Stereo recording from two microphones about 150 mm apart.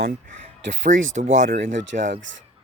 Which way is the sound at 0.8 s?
55° right (ahead or behind).